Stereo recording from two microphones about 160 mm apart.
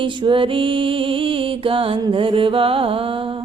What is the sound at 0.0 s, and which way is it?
Music, 30° right (ahead or behind).